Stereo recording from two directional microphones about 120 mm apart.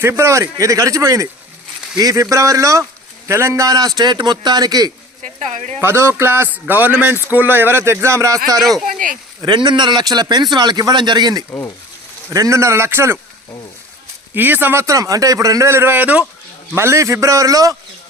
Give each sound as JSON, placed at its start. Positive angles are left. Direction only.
{"t": 0.0, "sound": "a man's voice", "side_deg": -20}
{"t": 5.2, "sound": "a sound", "side_deg": -80}
{"t": 5.8, "sound": "a man's voice", "side_deg": -20}
{"t": 8.8, "sound": "speech", "side_deg": -90}
{"t": 9.4, "sound": "a man's voice", "side_deg": -35}
{"t": 14.3, "sound": "a man's voice", "side_deg": -15}